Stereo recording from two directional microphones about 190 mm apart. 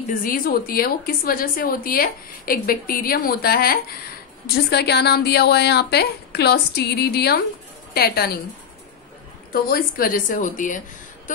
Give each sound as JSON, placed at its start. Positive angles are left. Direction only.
{"t": 0.2, "sound": "a woman's voice", "side_deg": 50}
{"t": 9.5, "sound": "a woman's voice", "side_deg": 50}
{"t": 11.3, "sound": "a sound", "side_deg": 45}